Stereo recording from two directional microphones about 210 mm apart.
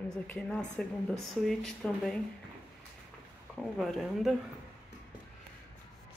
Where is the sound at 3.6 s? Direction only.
Centre (ahead or behind).